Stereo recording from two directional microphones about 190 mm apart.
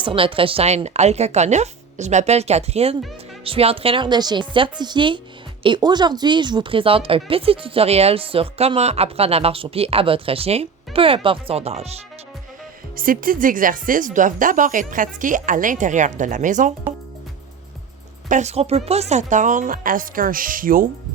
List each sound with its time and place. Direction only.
0.0 s speech: 25° right (ahead or behind)
13.0 s speech: 45° right (ahead or behind)
18.3 s speech: 35° right (ahead or behind)